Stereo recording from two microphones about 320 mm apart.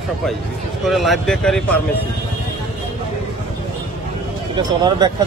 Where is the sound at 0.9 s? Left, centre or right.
Centre.